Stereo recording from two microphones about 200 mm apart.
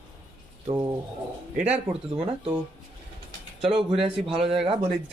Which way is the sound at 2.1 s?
30° right (ahead or behind).